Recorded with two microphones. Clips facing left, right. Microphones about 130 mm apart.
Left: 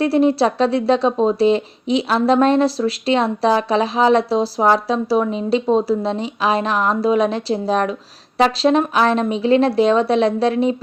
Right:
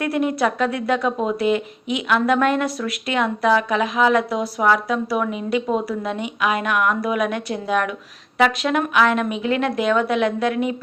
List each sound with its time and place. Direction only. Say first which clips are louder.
0.0 s a woman's voice: left 5 dB; 30° left (ahead or behind)